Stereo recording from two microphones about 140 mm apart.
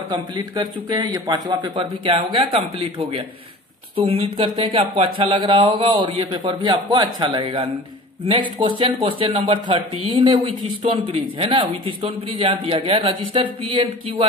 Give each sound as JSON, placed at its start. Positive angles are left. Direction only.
{"t": 0.1, "sound": "speech", "side_deg": -30}